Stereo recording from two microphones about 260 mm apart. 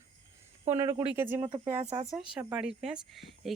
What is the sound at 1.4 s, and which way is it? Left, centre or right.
Speech, right.